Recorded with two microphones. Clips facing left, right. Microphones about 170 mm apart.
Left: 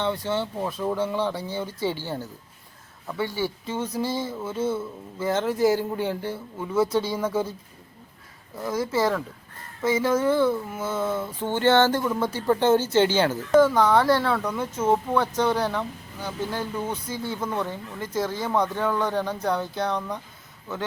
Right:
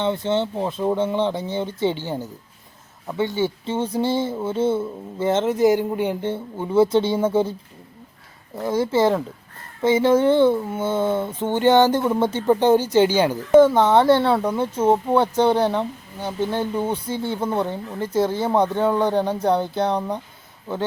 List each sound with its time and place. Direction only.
0.0 s speech: 20° right (ahead or behind)
8.6 s speech: 30° right (ahead or behind)
13.5 s speech: 25° right (ahead or behind)